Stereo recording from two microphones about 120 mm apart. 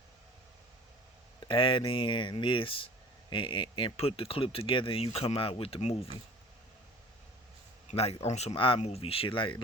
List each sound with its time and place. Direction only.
1.4 s speech: 45° left (ahead or behind)
7.9 s speech: 60° left (ahead or behind)